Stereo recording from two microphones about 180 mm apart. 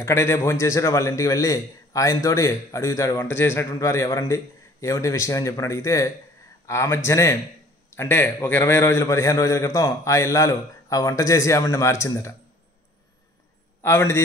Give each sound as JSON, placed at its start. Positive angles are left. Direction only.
{"t": 0.0, "sound": "a man's voice", "side_deg": 15}
{"t": 13.8, "sound": "a man's voice", "side_deg": 15}